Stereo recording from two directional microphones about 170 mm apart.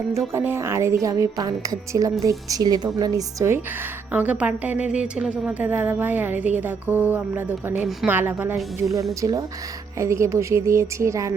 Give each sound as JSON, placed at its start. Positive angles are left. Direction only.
{"t": 0.3, "sound": "a woman's voice", "side_deg": -15}
{"t": 9.2, "sound": "a woman's voice", "side_deg": -20}